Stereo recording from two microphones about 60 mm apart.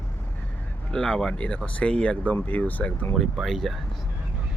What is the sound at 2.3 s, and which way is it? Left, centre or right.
Speech, left.